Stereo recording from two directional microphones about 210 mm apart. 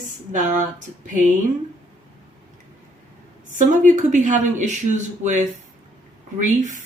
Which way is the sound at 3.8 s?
35° right (ahead or behind).